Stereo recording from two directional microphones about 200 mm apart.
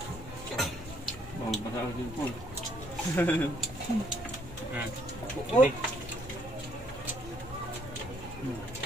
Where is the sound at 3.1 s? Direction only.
10° left (ahead or behind).